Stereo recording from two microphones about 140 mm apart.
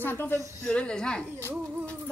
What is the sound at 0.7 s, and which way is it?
Speech, 5° left (ahead or behind).